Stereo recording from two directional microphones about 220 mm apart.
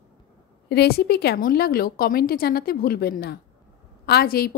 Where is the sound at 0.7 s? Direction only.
45° left (ahead or behind).